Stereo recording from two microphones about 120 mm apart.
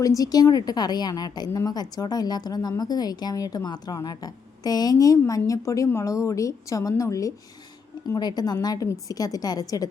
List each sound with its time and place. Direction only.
0.2 s speech: 30° left (ahead or behind)